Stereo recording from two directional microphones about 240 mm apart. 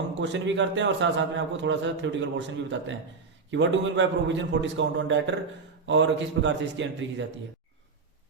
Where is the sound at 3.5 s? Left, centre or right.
Right.